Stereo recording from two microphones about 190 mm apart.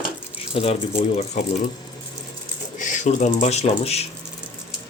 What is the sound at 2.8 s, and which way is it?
Speech, 40° left (ahead or behind).